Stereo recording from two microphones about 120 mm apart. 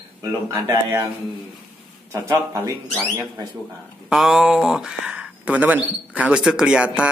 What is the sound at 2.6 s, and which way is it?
Speech, 30° right (ahead or behind).